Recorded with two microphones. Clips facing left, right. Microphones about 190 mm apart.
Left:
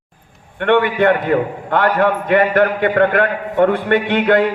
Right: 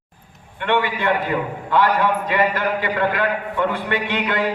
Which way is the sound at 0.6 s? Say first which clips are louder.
Left 7 dB; 55° left (ahead or behind).